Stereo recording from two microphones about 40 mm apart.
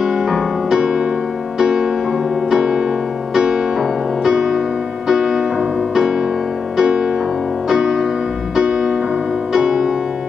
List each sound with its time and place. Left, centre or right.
0.0 s music: centre
6.8 s music: centre
8.5 s music: centre